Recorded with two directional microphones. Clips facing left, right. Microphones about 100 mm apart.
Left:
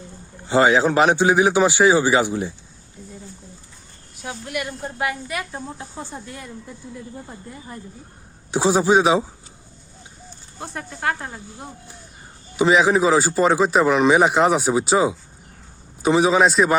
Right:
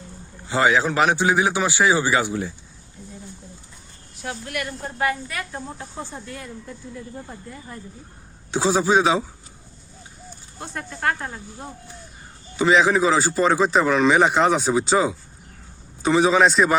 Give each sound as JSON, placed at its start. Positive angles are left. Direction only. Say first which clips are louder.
{"t": 0.4, "sound": "a man's voice", "louder": "left 3 dB", "side_deg": 30}
{"t": 4.2, "sound": "a woman's voice", "louder": "left 1 dB", "side_deg": 5}
{"t": 8.4, "sound": "a woman's voice", "louder": "left 2 dB", "side_deg": 15}
{"t": 10.8, "sound": "a woman's voice", "louder": "right 1 dB", "side_deg": 15}
{"t": 12.5, "sound": "a woman's voice", "louder": "left 1 dB", "side_deg": 10}